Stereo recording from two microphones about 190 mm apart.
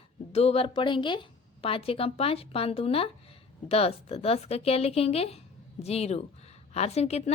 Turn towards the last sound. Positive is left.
turn(degrees=35)  # may be behind; listen again after turning